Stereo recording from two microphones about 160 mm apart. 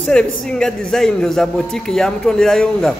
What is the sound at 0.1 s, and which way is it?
A man's voice, 5° left (ahead or behind).